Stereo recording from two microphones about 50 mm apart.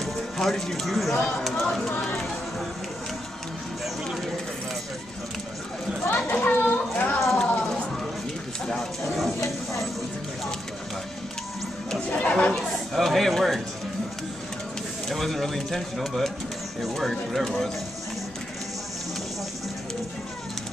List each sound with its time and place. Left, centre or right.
0.0 s speech: centre
1.9 s speech: left
6.0 s chatter: left
7.4 s a sound: left
9.0 s speech: centre
12.2 s speech: left
12.5 s speech: centre
15.0 s speech: centre